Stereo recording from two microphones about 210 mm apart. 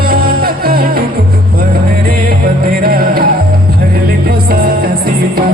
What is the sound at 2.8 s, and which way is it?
Music, 45° right (ahead or behind).